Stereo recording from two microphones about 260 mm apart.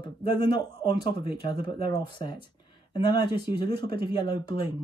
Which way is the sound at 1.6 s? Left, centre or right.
Right.